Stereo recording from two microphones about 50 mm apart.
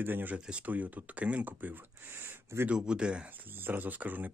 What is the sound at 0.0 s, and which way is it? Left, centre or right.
Speech, right.